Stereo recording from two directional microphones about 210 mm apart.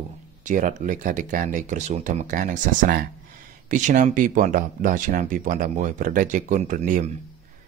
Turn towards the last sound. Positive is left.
turn(degrees=-35)  # may be behind; listen again after turning